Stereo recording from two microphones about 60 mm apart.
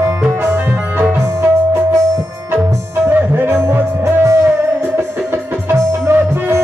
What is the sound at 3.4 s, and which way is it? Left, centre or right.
Music, right.